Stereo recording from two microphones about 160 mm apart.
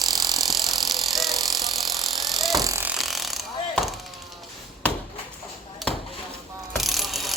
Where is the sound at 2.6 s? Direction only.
20° right (ahead or behind).